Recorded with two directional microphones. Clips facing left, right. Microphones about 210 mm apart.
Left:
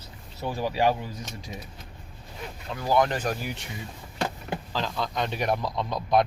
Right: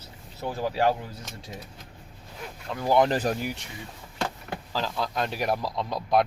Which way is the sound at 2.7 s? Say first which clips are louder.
Right 2 dB; 15° right (ahead or behind).